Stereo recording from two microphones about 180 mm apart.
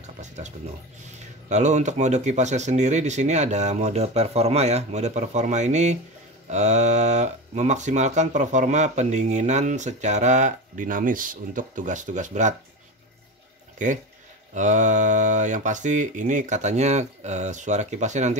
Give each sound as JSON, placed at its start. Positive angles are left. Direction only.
{"t": 0.0, "sound": "a sound", "side_deg": -40}
{"t": 1.2, "sound": "speech", "side_deg": -40}
{"t": 14.5, "sound": "speech", "side_deg": -45}